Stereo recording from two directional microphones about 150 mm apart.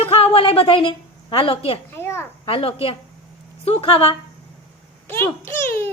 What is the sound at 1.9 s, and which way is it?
Speech, 15° left (ahead or behind).